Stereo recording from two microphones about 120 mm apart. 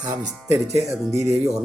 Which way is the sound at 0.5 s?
25° right (ahead or behind).